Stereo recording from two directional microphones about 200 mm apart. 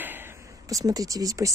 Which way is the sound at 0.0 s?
10° right (ahead or behind).